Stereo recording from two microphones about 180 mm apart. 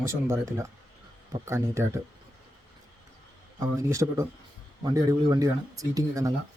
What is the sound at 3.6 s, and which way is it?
Speech, 15° right (ahead or behind).